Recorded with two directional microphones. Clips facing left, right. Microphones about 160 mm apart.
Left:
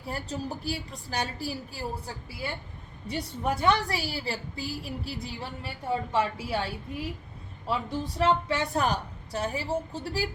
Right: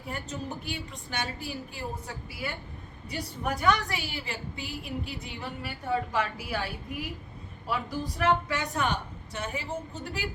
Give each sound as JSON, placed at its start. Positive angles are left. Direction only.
{"t": 0.1, "sound": "a woman's voice", "side_deg": 35}